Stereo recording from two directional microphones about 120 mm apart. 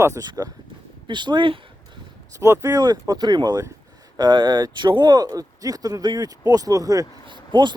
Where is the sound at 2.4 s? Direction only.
25° right (ahead or behind).